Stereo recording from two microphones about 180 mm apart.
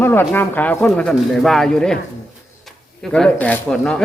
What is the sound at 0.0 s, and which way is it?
Speech, 10° left (ahead or behind).